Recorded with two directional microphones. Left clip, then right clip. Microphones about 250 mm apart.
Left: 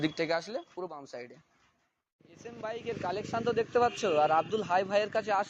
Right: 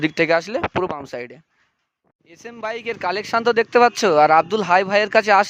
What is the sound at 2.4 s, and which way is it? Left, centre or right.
Speech, right.